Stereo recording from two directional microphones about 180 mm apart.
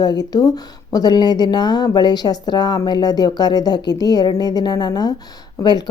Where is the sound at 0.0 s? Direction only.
20° left (ahead or behind).